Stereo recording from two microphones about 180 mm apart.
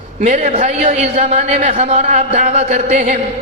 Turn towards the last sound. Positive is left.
turn(degrees=-40)  # may be behind; listen again after turning